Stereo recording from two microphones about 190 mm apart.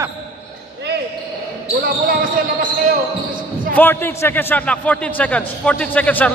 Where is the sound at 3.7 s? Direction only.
10° left (ahead or behind).